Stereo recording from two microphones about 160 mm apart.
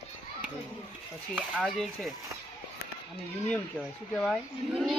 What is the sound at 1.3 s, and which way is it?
Speech, 5° right (ahead or behind).